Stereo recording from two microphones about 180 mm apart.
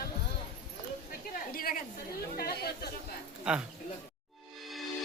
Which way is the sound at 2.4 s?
60° left (ahead or behind).